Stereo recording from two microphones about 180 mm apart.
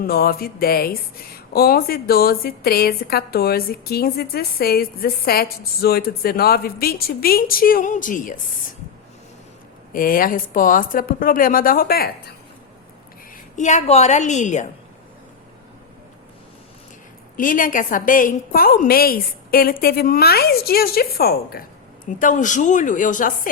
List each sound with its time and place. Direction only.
0.0 s a woman's voice: 55° left (ahead or behind)
9.9 s speech: 55° left (ahead or behind)
13.3 s a woman's voice: 40° left (ahead or behind)
17.3 s a woman's voice: 50° left (ahead or behind)
22.2 s speech: 45° left (ahead or behind)